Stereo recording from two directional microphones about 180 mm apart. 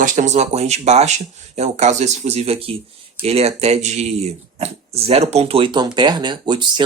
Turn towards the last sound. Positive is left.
turn(degrees=-25)  # may be behind; listen again after turning